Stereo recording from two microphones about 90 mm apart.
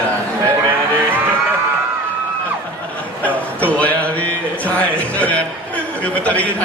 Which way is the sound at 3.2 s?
15° left (ahead or behind).